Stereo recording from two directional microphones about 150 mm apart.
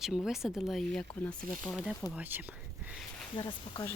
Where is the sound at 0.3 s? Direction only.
Centre (ahead or behind).